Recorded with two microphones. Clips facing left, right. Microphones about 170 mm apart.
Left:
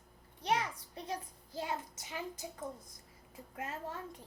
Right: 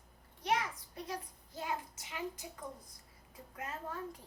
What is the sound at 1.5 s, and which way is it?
Speech, 30° left (ahead or behind).